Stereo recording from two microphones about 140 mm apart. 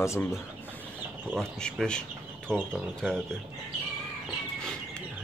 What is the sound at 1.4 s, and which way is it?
Speech, 5° left (ahead or behind).